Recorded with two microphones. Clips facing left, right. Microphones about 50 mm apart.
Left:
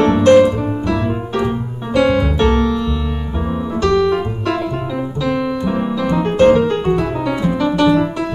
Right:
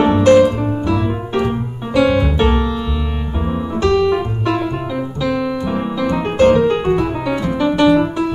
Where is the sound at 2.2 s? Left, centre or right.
Right.